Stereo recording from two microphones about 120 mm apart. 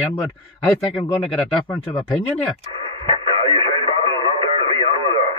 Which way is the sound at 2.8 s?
45° right (ahead or behind).